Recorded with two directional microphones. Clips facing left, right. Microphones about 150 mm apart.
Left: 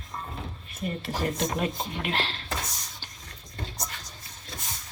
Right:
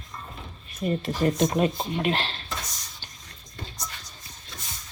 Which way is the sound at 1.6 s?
30° right (ahead or behind).